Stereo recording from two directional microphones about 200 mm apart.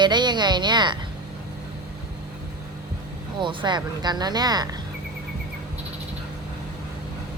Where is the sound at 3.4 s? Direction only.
20° right (ahead or behind).